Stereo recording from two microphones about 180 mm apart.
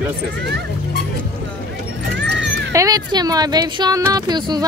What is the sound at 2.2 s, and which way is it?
Dog, 85° right.